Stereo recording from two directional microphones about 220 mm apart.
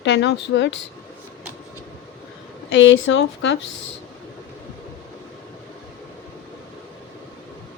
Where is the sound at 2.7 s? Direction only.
60° left (ahead or behind).